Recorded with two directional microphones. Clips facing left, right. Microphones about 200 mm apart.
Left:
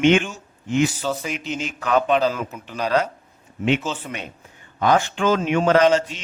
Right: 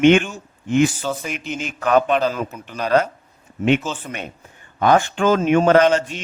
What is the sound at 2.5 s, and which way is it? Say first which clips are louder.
Speech: even; 5° left (ahead or behind).